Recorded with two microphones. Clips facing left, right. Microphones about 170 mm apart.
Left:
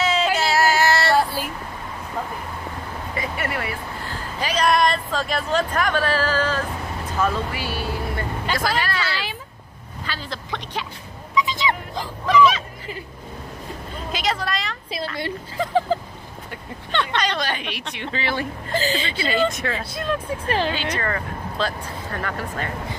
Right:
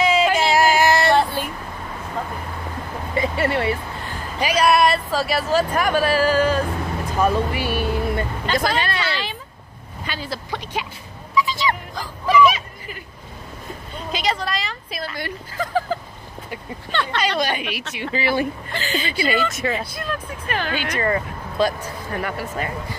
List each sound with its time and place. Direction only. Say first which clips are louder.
0.0 s a sound: right 3 dB; 10° right (ahead or behind)
1.1 s child singing: right 1 dB; 5° left (ahead or behind)
3.2 s speech: right 7 dB; 30° right (ahead or behind)
4.4 s a woman's voice: right 3 dB; 10° right (ahead or behind)
10.0 s vehicle: right 3 dB; 10° right (ahead or behind)
11.3 s dog: right 1 dB; 20° left (ahead or behind)
12.3 s hubbub: right 1 dB; 10° right (ahead or behind)
14.1 s vehicle: right 1 dB; centre (ahead or behind)
15.1 s speech: left 2 dB; 25° left (ahead or behind)
17.2 s speech: right 3 dB; 10° right (ahead or behind)
18.7 s a woman's voice: left 2 dB; 35° left (ahead or behind)
19.5 s speech: right 3 dB; 5° right (ahead or behind)
20.0 s speech: left 4 dB; 25° left (ahead or behind)
20.7 s speech: right 4 dB; 15° right (ahead or behind)